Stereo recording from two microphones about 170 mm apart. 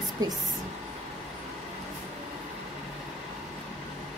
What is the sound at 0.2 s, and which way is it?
Speech, 20° right (ahead or behind).